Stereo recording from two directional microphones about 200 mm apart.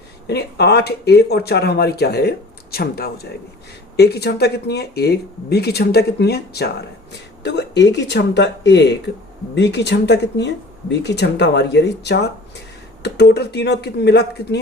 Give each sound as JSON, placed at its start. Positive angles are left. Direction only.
{"t": 0.3, "sound": "speech", "side_deg": 55}